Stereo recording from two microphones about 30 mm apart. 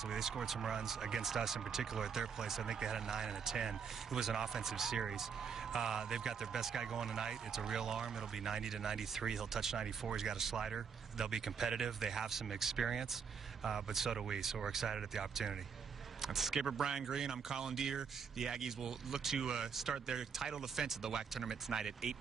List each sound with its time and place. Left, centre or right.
0.1 s speech: centre
19.7 s speech: centre
20.1 s speech: centre